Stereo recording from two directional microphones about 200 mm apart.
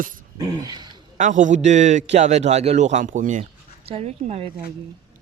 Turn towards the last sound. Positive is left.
turn(degrees=-30)  # may be behind; listen again after turning